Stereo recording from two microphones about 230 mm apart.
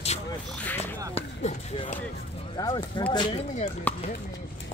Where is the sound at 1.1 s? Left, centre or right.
Left.